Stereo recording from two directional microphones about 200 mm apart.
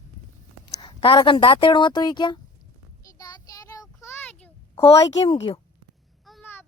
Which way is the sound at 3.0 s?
20° left (ahead or behind).